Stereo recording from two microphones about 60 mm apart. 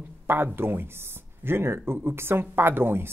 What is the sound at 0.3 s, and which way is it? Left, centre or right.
Speech, right.